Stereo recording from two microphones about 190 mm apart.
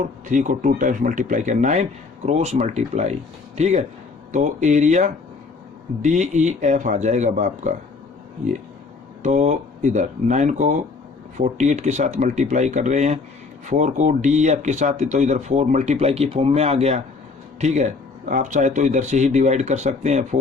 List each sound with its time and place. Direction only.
0.3 s speech: 40° right (ahead or behind)
9.2 s speech: 40° right (ahead or behind)